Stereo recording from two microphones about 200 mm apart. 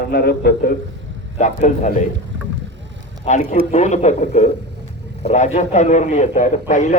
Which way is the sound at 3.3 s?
40° left (ahead or behind).